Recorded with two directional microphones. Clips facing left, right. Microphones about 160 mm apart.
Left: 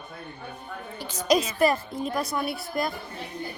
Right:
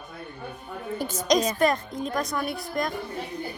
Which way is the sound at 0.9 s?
50° right (ahead or behind).